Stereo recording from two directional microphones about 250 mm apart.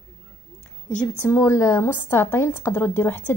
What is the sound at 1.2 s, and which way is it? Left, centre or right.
A woman's voice, centre.